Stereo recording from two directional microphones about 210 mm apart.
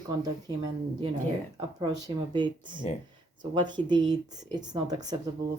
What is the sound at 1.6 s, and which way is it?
Speech, 20° right (ahead or behind).